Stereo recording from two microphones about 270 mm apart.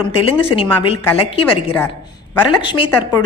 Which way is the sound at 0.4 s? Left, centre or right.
Centre.